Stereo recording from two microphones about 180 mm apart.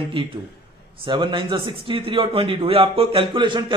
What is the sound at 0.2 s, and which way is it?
A man's voice, 30° right (ahead or behind).